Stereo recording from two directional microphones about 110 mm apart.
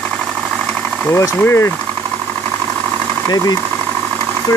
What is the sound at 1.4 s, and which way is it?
Speech, 25° left (ahead or behind).